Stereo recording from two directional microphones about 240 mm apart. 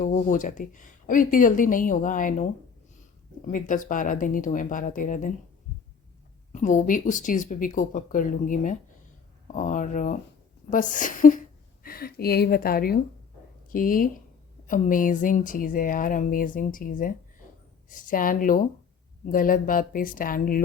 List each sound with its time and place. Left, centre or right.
0.0 s speech: left
6.5 s speech: left